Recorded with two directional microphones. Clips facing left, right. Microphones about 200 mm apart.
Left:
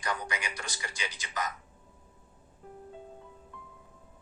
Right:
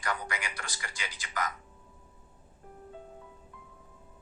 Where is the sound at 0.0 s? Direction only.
20° left (ahead or behind).